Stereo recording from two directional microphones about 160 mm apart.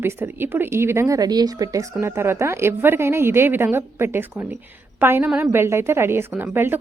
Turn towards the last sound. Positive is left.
turn(degrees=-15)  # may be behind; listen again after turning